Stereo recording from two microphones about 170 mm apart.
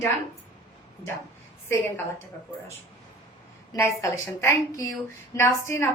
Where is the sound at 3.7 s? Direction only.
20° left (ahead or behind).